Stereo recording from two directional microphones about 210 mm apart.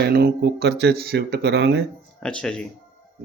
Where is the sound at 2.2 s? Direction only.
5° left (ahead or behind).